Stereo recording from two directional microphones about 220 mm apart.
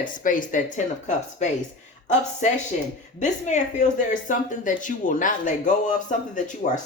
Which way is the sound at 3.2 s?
35° left (ahead or behind).